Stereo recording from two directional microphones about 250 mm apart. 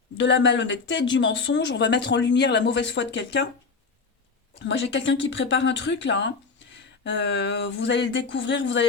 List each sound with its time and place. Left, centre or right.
0.2 s speech: left
4.6 s speech: left